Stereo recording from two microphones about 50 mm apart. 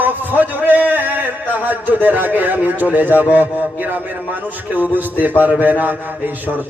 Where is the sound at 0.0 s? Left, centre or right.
Right.